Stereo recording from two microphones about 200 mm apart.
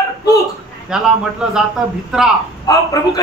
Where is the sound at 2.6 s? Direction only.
15° left (ahead or behind).